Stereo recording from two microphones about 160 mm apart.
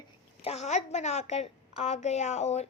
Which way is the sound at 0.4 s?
45° left (ahead or behind).